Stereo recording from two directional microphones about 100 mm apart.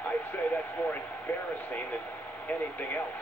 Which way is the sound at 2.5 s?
20° left (ahead or behind).